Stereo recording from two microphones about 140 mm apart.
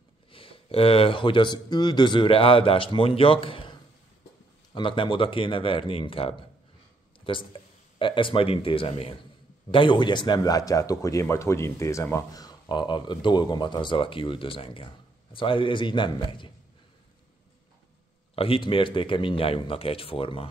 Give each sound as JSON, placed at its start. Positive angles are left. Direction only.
{"t": 0.3, "sound": "speech", "side_deg": 40}
{"t": 4.7, "sound": "speech", "side_deg": 35}
{"t": 18.3, "sound": "speech", "side_deg": 40}